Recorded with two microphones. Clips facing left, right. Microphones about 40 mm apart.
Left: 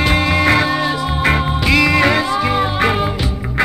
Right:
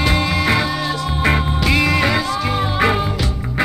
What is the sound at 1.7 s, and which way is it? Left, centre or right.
Music, left.